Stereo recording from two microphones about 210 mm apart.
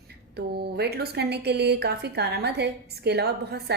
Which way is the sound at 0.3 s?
50° right (ahead or behind).